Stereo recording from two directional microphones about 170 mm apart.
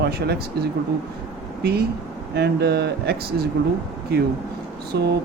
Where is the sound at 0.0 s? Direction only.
70° right (ahead or behind).